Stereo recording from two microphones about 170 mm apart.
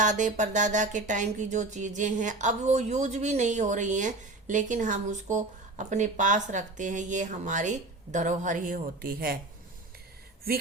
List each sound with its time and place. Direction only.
0.0 s speech: 45° right (ahead or behind)